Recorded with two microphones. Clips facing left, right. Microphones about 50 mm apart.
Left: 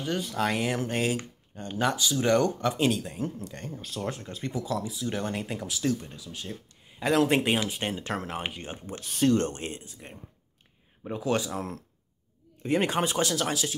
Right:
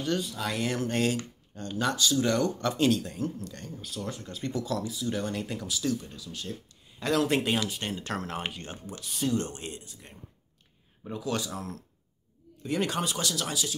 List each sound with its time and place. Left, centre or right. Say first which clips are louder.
0.2 s speech: left 5 dB; left
0.6 s speech: even; centre
1.7 s speech: left 2 dB; left
2.0 s speech: right 2 dB; centre
2.2 s speech: left 7 dB; left
2.6 s speech: even; centre; by 3.9 s left
4.4 s speech: right 1 dB; centre
4.9 s speech: even; left
8.8 s speech: left 7 dB; left